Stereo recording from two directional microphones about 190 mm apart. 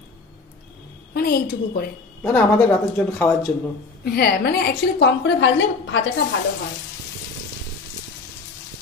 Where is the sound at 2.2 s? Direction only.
10° left (ahead or behind).